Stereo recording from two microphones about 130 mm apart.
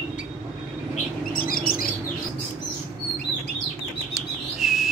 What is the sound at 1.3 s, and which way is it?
Bird, 90° left.